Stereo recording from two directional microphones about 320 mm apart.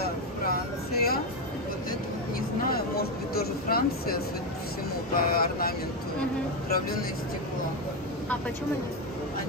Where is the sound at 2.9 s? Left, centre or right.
Left.